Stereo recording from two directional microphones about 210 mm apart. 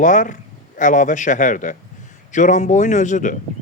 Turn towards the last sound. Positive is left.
turn(degrees=35)  # may be behind; listen again after turning